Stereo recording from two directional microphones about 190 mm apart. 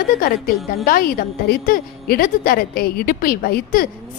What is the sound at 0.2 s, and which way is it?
A woman's voice, 50° left (ahead or behind).